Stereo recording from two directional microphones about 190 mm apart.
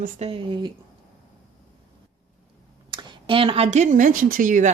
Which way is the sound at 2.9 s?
25° right (ahead or behind).